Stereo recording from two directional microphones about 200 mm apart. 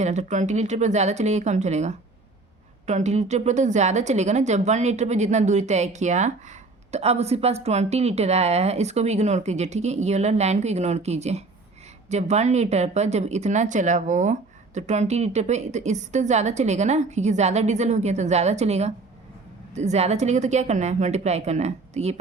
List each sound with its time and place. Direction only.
0.0 s speech: 35° right (ahead or behind)